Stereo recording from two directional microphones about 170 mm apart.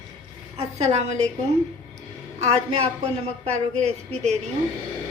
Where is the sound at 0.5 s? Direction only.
40° right (ahead or behind).